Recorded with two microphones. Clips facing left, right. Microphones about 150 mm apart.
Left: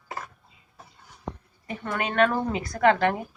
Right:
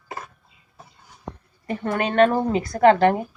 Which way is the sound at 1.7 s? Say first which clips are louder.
Right 6 dB; 35° right (ahead or behind).